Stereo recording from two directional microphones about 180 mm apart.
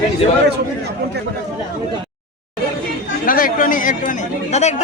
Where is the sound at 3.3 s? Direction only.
50° left (ahead or behind).